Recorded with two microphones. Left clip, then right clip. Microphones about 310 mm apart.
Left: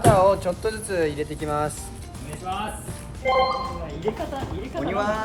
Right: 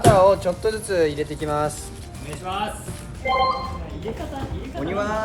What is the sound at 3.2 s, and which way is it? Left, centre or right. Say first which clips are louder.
Speech: even; centre.